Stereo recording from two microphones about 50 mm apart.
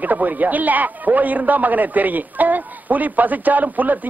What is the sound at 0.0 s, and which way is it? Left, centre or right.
A man's voice, right.